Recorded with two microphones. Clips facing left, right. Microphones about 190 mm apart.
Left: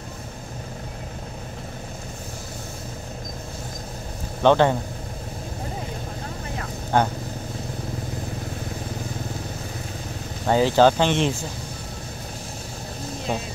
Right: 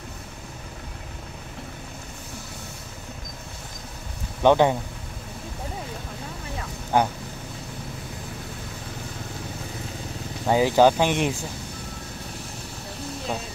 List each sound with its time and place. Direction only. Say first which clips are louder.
4.4 s speech: left 1 dB; 10° right (ahead or behind)
6.9 s speech: left 1 dB; 10° right (ahead or behind)
10.4 s speech: left 1 dB; 10° right (ahead or behind)